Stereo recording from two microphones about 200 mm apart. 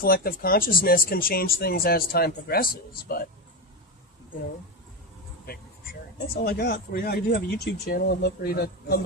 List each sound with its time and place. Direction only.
0.0 s speech: 50° left (ahead or behind)
5.5 s speech: 50° left (ahead or behind)